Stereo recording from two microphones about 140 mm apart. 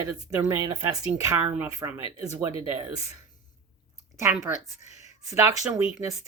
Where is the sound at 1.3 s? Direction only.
20° right (ahead or behind).